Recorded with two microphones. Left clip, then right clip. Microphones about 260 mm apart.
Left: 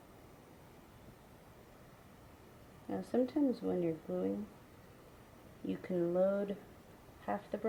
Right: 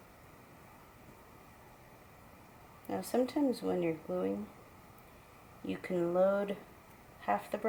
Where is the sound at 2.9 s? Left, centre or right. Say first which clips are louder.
Right 2 dB; centre.